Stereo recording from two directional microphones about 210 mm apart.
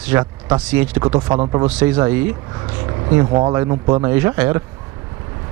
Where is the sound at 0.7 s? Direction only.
5° right (ahead or behind).